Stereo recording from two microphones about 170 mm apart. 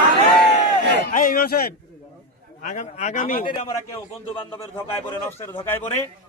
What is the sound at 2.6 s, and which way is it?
Speech, 50° left (ahead or behind).